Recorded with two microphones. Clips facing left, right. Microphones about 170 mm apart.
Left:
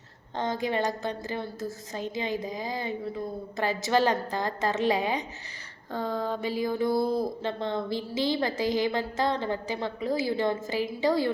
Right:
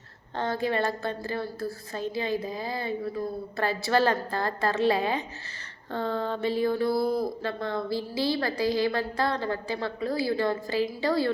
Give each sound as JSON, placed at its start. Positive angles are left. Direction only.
{"t": 0.3, "sound": "a woman's voice", "side_deg": 15}